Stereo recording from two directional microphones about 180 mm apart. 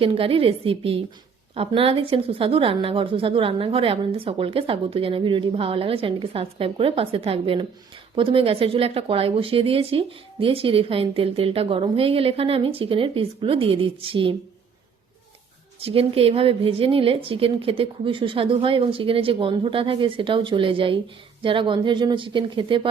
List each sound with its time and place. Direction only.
0.0 s speech: 30° right (ahead or behind)
15.8 s a woman's voice: 30° right (ahead or behind)